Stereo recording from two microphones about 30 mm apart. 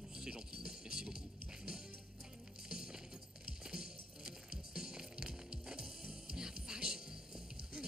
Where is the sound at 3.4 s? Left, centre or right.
Right.